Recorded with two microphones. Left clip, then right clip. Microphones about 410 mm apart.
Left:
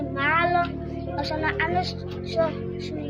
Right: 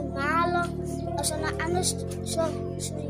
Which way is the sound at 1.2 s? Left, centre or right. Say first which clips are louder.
Left 6 dB; right.